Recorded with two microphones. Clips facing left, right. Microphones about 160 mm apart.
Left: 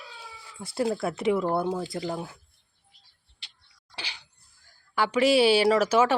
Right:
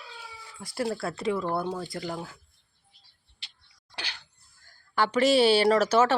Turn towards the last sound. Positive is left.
turn(degrees=10)  # may be behind; listen again after turning